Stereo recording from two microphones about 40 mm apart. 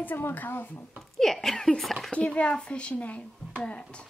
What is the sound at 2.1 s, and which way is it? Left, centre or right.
A woman's voice, left.